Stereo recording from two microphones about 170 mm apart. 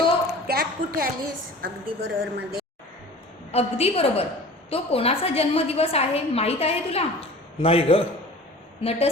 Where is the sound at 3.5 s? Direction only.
35° left (ahead or behind).